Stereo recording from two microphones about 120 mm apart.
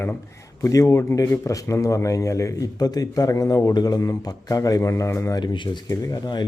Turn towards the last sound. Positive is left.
turn(degrees=35)  # may be behind; listen again after turning